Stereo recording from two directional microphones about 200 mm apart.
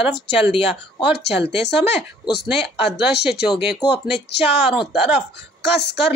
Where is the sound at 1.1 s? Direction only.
55° left (ahead or behind).